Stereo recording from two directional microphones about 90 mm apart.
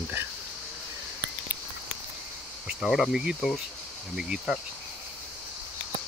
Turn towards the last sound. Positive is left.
turn(degrees=-5)  # may be behind; listen again after turning